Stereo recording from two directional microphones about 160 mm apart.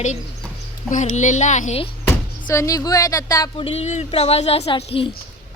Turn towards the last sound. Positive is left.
turn(degrees=35)  # may be behind; listen again after turning